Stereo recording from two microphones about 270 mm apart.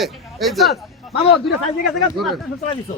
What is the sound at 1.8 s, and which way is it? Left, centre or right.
Speech, centre.